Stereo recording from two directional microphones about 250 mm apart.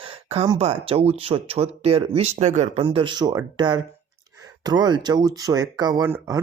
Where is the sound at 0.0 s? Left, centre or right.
Right.